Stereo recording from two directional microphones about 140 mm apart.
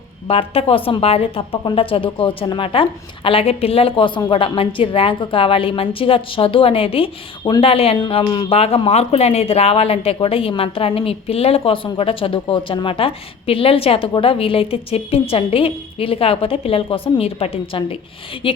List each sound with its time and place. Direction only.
0.3 s speech: 40° left (ahead or behind)
7.9 s speech: 30° left (ahead or behind)